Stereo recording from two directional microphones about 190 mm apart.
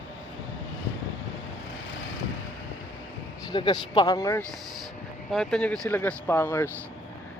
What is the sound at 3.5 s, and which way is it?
Speech, 25° left (ahead or behind).